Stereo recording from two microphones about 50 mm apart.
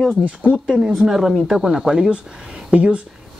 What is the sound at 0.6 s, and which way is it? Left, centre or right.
Speech, centre.